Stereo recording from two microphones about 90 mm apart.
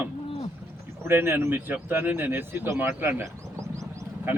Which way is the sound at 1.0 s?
25° right (ahead or behind).